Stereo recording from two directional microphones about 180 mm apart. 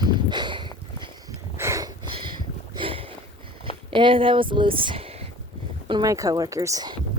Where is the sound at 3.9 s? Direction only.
30° right (ahead or behind).